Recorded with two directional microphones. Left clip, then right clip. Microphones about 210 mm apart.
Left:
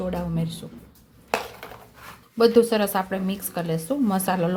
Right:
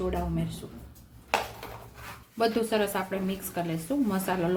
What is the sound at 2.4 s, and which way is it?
A woman's voice, 35° left (ahead or behind).